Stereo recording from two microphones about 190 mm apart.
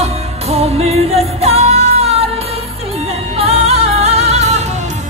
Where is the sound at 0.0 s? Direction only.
30° right (ahead or behind).